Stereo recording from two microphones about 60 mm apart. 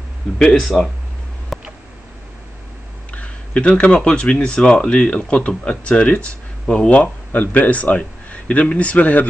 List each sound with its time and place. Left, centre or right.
0.4 s speech: centre
1.5 s tick: centre
3.1 s speech: left